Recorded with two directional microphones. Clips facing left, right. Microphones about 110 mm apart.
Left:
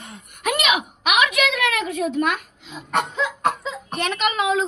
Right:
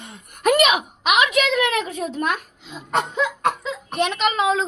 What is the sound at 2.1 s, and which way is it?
Speech, 35° right (ahead or behind).